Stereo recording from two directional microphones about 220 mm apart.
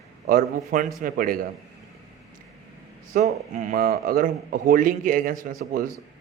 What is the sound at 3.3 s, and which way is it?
A man's voice, 35° right (ahead or behind).